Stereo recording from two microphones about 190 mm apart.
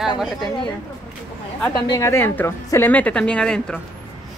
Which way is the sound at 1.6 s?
20° left (ahead or behind).